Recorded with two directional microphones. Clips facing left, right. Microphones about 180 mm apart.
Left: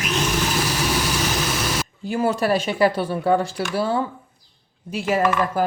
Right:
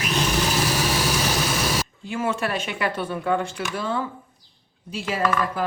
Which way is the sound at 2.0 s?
35° left (ahead or behind).